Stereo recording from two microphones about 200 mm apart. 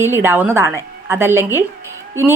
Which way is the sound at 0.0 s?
10° right (ahead or behind).